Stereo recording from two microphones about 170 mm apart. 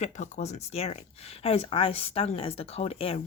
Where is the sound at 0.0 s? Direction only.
45° left (ahead or behind).